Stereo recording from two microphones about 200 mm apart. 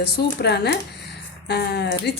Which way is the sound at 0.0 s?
55° left (ahead or behind).